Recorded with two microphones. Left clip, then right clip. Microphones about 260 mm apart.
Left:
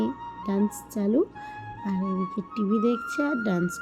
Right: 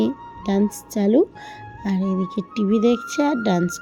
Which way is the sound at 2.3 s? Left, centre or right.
Right.